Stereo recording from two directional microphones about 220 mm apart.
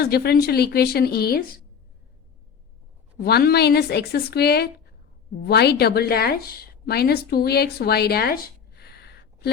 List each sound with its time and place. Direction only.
0.0 s a woman's voice: 45° left (ahead or behind)
3.2 s a woman's voice: 45° left (ahead or behind)